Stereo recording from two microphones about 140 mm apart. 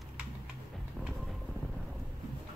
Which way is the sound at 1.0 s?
5° left (ahead or behind).